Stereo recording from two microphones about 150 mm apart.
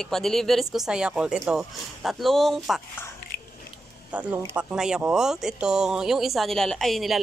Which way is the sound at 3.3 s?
90° left.